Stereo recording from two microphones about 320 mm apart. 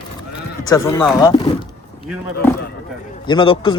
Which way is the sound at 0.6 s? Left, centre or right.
Centre.